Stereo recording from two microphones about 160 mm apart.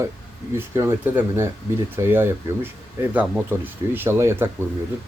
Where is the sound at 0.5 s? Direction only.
15° right (ahead or behind).